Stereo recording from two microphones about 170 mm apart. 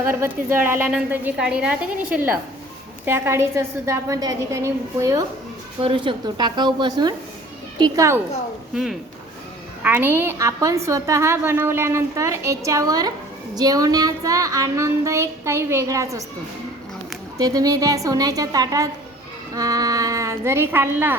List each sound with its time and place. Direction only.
0.0 s a woman's voice: 15° right (ahead or behind)
5.8 s child singing: 30° right (ahead or behind)
8.7 s a woman's voice: centre (ahead or behind); by 13.1 s 20° right (ahead or behind)
13.6 s child singing: 20° right (ahead or behind)
17.3 s child singing: 20° right (ahead or behind)
19.5 s a woman's voice: 20° right (ahead or behind)